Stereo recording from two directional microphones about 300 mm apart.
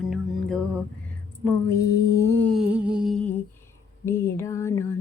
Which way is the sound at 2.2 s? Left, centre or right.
Centre.